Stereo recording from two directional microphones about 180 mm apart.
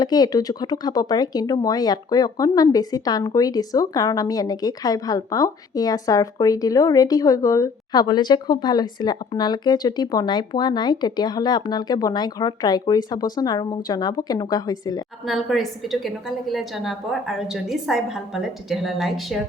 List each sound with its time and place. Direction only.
0.0 s speech: 20° left (ahead or behind)
15.2 s a woman's voice: centre (ahead or behind)